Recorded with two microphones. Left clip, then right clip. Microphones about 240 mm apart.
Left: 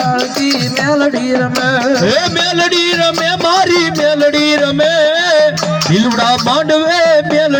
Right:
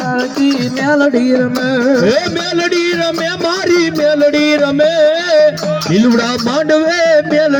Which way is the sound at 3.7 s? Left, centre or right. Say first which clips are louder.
Even; centre.